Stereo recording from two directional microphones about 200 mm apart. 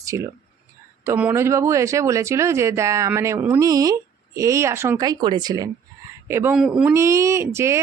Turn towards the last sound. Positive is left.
turn(degrees=-15)  # may be behind; listen again after turning